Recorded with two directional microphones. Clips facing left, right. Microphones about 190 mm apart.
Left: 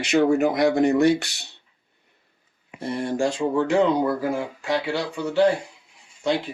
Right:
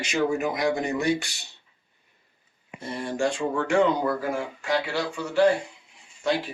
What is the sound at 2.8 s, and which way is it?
Speech, 60° left (ahead or behind).